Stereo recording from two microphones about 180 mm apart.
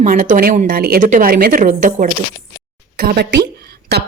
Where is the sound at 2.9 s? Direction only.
65° right (ahead or behind).